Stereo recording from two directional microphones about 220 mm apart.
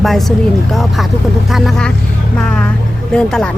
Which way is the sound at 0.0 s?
Centre (ahead or behind).